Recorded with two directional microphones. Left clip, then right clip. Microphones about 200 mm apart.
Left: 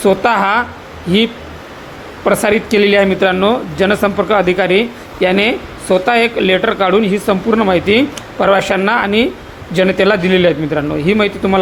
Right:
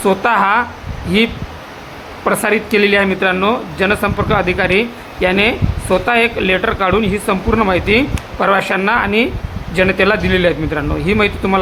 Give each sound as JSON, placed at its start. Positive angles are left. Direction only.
{"t": 0.0, "sound": "speech", "side_deg": 15}
{"t": 2.2, "sound": "speech", "side_deg": 15}